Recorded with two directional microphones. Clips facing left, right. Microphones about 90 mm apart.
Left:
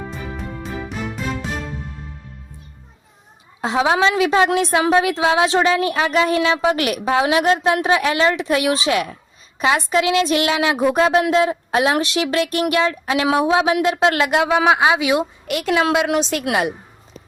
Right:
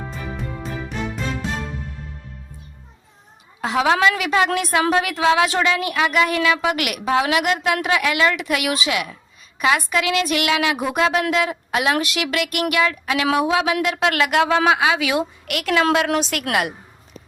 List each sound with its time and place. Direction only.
0.1 s music: centre (ahead or behind)
3.6 s a woman's voice: 25° left (ahead or behind)